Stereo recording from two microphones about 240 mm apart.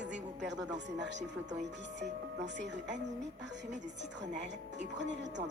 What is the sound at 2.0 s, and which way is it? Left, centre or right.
Speech, right.